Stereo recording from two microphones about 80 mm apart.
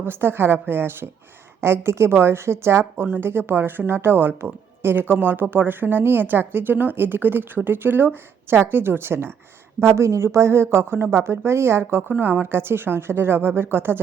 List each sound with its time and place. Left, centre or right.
0.0 s a woman's voice: right